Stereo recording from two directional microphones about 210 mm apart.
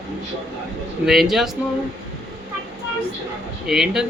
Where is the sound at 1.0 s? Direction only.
Centre (ahead or behind).